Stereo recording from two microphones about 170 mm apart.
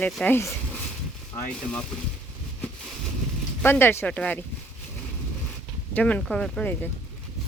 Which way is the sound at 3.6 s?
15° left (ahead or behind).